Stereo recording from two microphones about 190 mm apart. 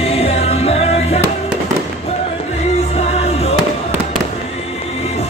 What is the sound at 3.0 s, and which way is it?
Music, 35° left (ahead or behind).